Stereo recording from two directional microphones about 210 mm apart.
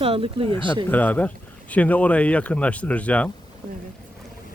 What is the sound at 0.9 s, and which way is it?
Speech, 10° left (ahead or behind).